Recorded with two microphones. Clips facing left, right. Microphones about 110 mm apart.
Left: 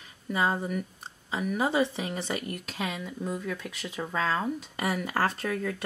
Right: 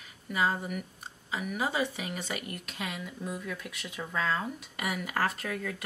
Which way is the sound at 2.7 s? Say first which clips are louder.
Left 4 dB; centre (ahead or behind).